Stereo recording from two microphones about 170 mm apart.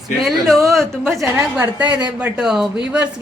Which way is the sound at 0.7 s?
Centre (ahead or behind).